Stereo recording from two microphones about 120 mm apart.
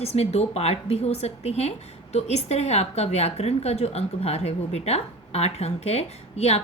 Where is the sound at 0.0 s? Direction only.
60° left (ahead or behind).